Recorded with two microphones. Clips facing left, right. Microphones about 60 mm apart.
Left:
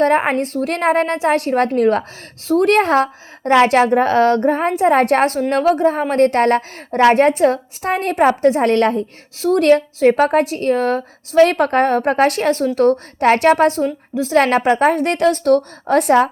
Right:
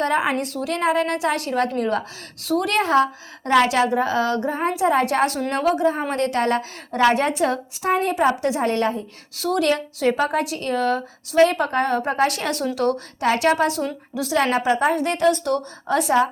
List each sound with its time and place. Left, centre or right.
0.0 s a woman's voice: left
2.4 s a woman's voice: left
2.6 s a woman's voice: left
8.6 s a woman's voice: left
9.6 s a woman's voice: left
14.3 s a woman's voice: left